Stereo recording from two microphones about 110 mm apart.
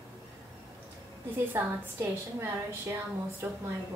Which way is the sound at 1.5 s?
25° right (ahead or behind).